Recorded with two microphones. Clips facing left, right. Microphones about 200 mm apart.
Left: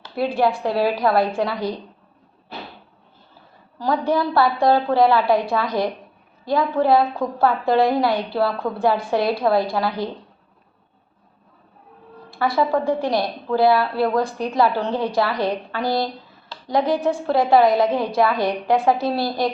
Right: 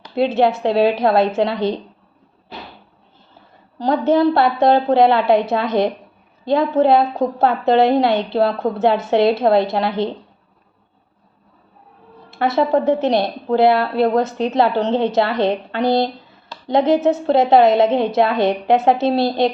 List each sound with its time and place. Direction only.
0.0 s a woman's voice: 20° right (ahead or behind)
3.8 s a woman's voice: 25° right (ahead or behind)
12.3 s a woman's voice: 25° right (ahead or behind)